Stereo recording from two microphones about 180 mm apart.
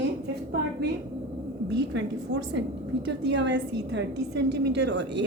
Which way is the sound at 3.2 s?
80° right.